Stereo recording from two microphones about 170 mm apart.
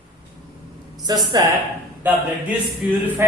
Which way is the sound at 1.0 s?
25° right (ahead or behind).